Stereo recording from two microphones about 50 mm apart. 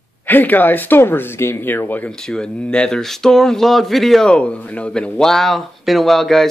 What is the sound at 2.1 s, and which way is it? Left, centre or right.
Speech, centre.